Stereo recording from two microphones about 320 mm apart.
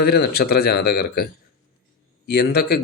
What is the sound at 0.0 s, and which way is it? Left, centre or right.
Speech, left.